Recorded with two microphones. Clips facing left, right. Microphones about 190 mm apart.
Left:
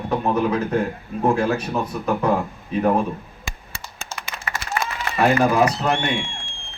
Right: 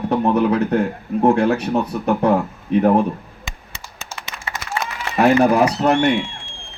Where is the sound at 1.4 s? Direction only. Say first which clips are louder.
Right 4 dB; 65° right (ahead or behind).